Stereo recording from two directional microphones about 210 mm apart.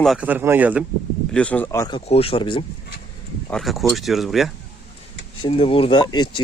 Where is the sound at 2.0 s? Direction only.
30° left (ahead or behind).